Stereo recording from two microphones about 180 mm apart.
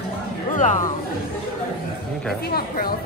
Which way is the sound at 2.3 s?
60° left (ahead or behind).